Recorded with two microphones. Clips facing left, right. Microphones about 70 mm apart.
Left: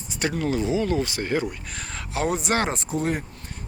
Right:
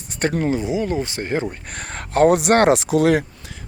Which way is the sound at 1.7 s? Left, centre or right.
Right.